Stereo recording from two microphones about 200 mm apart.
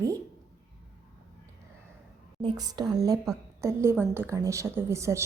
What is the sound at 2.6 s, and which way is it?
A woman's voice, 20° right (ahead or behind).